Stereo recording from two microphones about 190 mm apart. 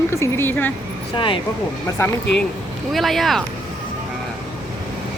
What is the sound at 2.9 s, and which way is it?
Speech, centre (ahead or behind).